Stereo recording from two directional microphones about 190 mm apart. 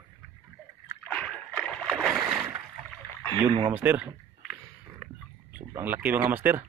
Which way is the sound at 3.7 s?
10° right (ahead or behind).